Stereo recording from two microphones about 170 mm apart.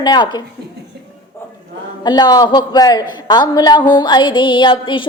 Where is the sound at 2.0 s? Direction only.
25° left (ahead or behind).